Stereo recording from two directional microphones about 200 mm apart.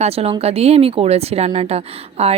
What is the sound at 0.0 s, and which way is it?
Speech, 30° right (ahead or behind).